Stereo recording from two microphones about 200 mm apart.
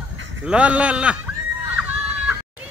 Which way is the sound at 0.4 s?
5° right (ahead or behind).